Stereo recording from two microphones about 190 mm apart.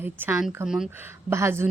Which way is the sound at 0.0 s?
10° right (ahead or behind).